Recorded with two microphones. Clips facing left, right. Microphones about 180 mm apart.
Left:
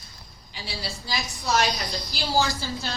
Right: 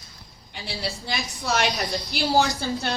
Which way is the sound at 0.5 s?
60° right (ahead or behind).